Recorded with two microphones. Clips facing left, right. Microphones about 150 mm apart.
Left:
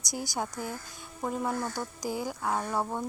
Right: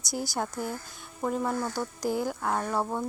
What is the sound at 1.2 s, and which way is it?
Speech, 5° left (ahead or behind).